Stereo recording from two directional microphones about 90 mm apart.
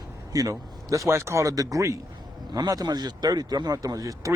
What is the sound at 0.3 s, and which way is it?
Speech, 40° right (ahead or behind).